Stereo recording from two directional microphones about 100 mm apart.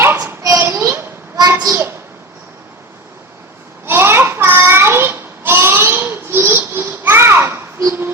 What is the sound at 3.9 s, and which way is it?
Child singing, 25° right (ahead or behind).